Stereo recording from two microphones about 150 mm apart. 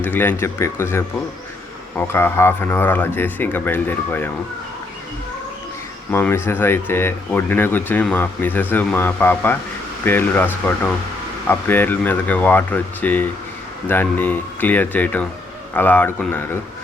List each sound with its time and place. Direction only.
0.0 s speech: 15° left (ahead or behind)
6.1 s speech: 15° left (ahead or behind)